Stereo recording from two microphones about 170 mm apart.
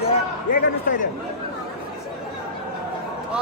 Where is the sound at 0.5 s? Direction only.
50° left (ahead or behind).